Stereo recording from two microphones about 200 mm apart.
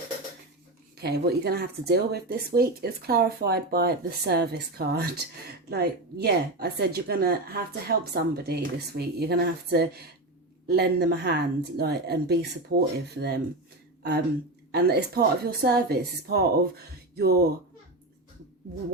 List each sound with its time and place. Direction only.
0.9 s a woman's voice: 55° right (ahead or behind)
14.7 s speech: 55° right (ahead or behind)